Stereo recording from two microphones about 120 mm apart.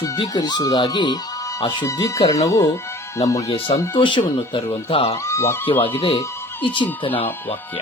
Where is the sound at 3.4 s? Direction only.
50° left (ahead or behind).